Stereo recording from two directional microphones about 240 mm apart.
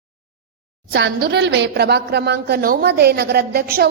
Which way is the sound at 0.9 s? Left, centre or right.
Right.